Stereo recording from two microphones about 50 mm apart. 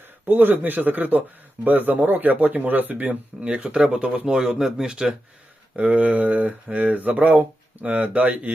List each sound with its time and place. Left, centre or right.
0.3 s speech: right; by 5.1 s centre
5.7 s speech: right